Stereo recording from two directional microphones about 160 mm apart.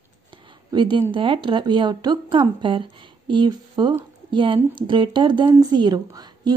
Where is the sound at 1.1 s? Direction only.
30° right (ahead or behind).